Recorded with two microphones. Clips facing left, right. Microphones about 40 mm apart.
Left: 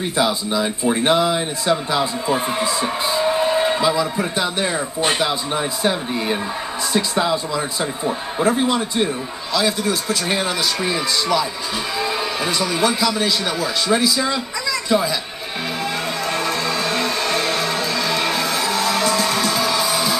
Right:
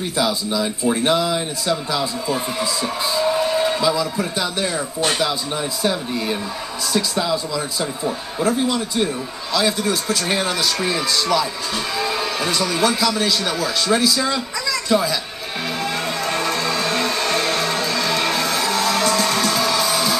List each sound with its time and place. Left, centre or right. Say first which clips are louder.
0.2 s a man's voice: left 1 dB; left
9.5 s a man's voice: even; centre
15.8 s music: even; centre